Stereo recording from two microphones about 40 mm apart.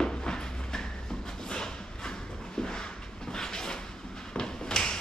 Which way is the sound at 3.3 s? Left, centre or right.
Centre.